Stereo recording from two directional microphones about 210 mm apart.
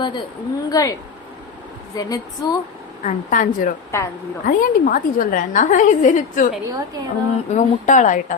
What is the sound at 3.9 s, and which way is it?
Speech, 15° left (ahead or behind).